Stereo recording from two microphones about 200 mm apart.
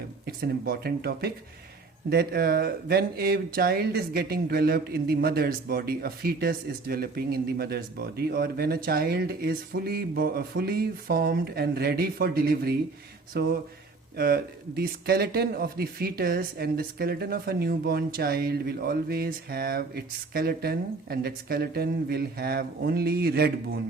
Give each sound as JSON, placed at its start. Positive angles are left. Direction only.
{"t": 0.3, "sound": "speech", "side_deg": -50}